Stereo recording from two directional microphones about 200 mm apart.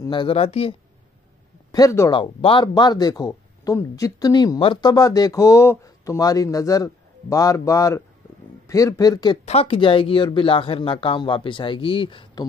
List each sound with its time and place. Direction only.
0.0 s speech: 25° left (ahead or behind)
1.7 s speech: 15° left (ahead or behind)